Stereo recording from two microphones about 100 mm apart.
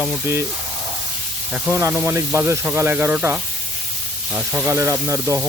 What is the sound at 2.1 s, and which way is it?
Speech, 25° right (ahead or behind).